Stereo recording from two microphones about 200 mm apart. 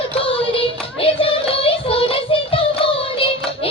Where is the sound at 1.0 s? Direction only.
25° left (ahead or behind).